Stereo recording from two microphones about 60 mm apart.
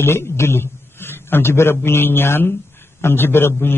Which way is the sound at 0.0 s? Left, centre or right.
Left.